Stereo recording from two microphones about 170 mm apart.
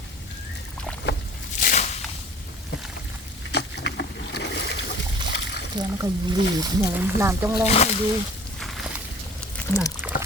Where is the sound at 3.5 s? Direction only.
85° left.